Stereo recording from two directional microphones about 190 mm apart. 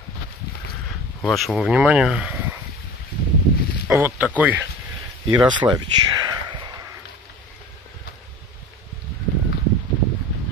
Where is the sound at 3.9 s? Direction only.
15° right (ahead or behind).